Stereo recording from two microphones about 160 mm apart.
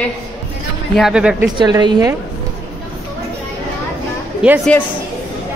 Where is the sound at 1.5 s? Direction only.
25° right (ahead or behind).